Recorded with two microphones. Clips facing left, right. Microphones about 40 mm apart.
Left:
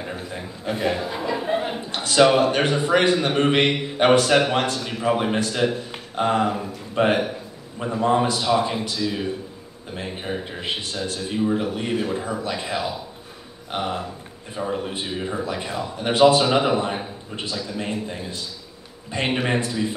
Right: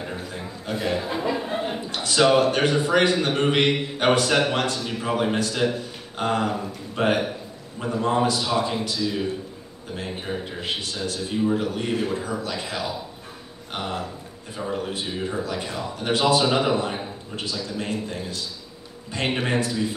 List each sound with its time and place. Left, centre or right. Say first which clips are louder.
0.3 s a man's voice: left 2 dB; centre
1.0 s speech: right 1 dB; centre
1.3 s a sound: left 4 dB; centre
2.1 s a man's voice: left 2 dB; centre